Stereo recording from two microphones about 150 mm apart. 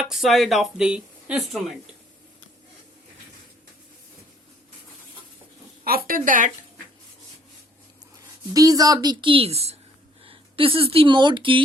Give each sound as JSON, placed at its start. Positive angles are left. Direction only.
{"t": 0.0, "sound": "speech", "side_deg": 0}
{"t": 5.8, "sound": "a woman's voice", "side_deg": -80}
{"t": 8.5, "sound": "a woman's voice", "side_deg": -25}